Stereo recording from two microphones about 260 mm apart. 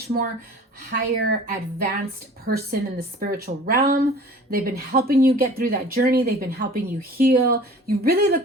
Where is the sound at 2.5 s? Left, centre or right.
Right.